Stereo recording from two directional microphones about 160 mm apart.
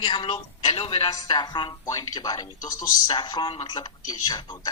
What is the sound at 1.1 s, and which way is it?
Speech, 25° left (ahead or behind).